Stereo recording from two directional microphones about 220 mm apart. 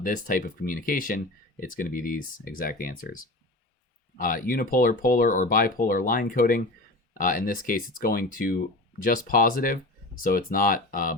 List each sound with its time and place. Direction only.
0.0 s speech: 40° left (ahead or behind)